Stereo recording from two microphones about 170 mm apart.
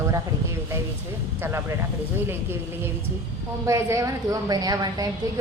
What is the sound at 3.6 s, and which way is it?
A woman's voice, 15° right (ahead or behind).